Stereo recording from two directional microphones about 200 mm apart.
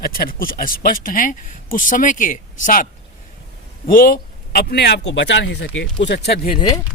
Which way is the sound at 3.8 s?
45° left (ahead or behind).